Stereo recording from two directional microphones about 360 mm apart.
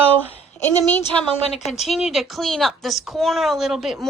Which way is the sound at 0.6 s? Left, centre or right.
Centre.